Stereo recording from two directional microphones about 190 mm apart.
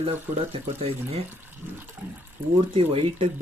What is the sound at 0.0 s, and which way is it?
Speech, 30° right (ahead or behind).